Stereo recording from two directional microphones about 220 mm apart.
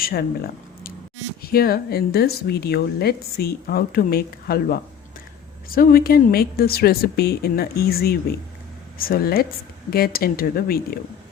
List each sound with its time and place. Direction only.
0.0 s speech: 45° left (ahead or behind)